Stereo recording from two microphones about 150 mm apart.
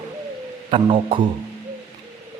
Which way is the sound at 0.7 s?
35° right (ahead or behind).